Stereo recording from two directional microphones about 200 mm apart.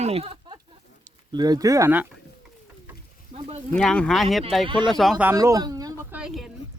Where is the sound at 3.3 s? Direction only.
30° right (ahead or behind).